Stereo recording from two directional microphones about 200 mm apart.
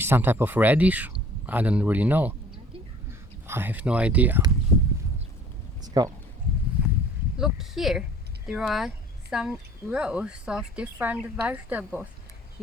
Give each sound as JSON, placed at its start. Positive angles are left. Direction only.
{"t": 0.0, "sound": "speech", "side_deg": -10}
{"t": 5.8, "sound": "speech", "side_deg": -20}
{"t": 7.3, "sound": "speech", "side_deg": 0}